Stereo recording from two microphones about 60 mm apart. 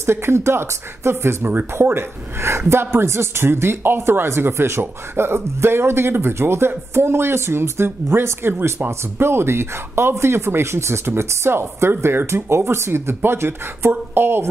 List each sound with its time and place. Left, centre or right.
0.0 s speech: right